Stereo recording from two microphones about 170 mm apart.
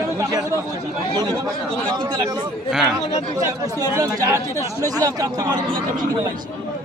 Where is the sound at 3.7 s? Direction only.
20° right (ahead or behind).